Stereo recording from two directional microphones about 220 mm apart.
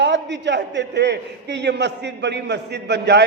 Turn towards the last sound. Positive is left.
turn(degrees=-50)  # may be behind; listen again after turning